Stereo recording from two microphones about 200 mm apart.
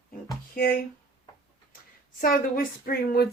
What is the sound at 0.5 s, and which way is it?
Speech, 45° left (ahead or behind).